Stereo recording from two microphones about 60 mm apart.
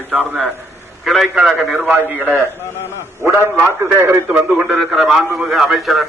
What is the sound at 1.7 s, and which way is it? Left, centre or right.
Speech, centre.